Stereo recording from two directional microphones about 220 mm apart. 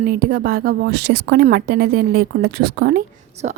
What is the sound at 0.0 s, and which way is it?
Speech, 40° right (ahead or behind).